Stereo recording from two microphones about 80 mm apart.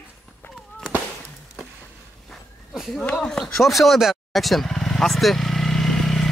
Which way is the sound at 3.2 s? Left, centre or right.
Centre.